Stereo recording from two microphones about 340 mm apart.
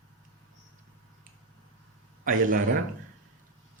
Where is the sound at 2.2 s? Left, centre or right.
Right.